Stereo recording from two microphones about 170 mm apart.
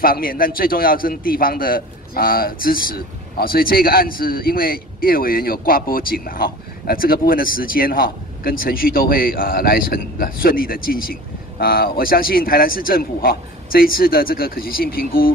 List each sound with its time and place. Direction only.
0.0 s a man's voice: 60° left (ahead or behind)